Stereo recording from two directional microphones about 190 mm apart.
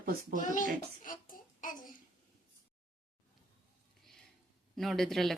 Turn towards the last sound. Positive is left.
turn(degrees=0)  # may be behind; listen again after turning